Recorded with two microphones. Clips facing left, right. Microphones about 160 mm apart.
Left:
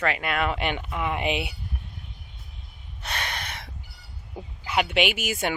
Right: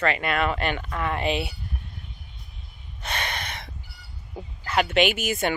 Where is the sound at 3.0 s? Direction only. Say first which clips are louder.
Right 2 dB; centre (ahead or behind).